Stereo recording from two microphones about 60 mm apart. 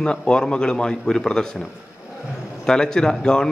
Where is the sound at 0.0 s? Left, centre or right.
Centre.